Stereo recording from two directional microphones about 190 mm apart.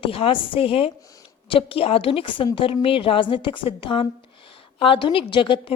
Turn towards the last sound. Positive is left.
turn(degrees=25)  # may be behind; listen again after turning